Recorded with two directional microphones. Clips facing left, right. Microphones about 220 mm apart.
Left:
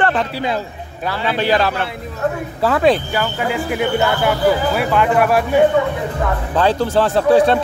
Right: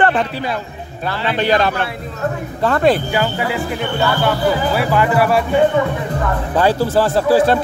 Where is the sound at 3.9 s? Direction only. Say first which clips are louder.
Right 2 dB; 20° left (ahead or behind).